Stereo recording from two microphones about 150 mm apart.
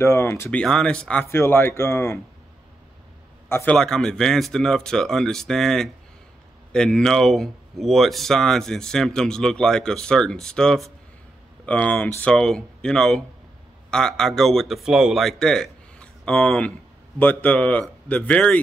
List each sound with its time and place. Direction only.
0.0 s speech: 15° left (ahead or behind)
3.4 s a man's voice: 15° left (ahead or behind)
3.7 s speech: 5° left (ahead or behind)